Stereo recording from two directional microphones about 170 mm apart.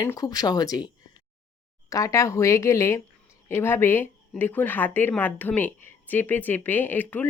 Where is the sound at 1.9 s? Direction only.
20° left (ahead or behind).